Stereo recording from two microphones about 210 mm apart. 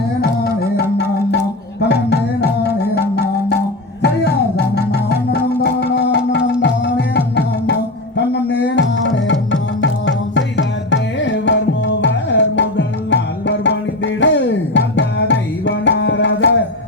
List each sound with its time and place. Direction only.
1.8 s music: 55° left (ahead or behind)
4.0 s music: 55° left (ahead or behind)
12.0 s tabla: 60° left (ahead or behind)